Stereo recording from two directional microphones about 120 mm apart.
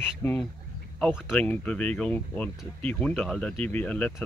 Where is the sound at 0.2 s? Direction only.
20° left (ahead or behind).